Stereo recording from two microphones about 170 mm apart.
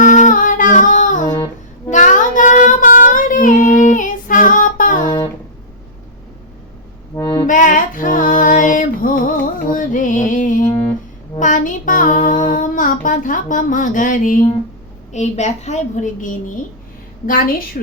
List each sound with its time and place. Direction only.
0.0 s music: 50° left (ahead or behind)
1.9 s child singing: 50° left (ahead or behind)
5.0 s music: 30° left (ahead or behind)
7.2 s music: 20° left (ahead or behind)
7.4 s music: 50° left (ahead or behind)
11.3 s child singing: 50° left (ahead or behind)
15.1 s a woman's voice: 40° left (ahead or behind)